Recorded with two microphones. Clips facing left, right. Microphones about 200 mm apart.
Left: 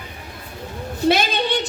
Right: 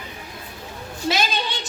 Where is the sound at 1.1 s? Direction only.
60° left (ahead or behind).